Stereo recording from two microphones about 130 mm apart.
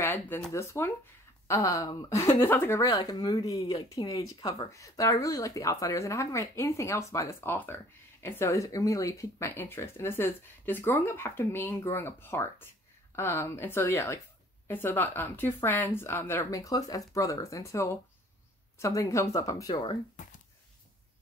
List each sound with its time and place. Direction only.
0.0 s a sound: 20° left (ahead or behind)
0.5 s speech: 20° left (ahead or behind)
2.9 s speech: 30° left (ahead or behind)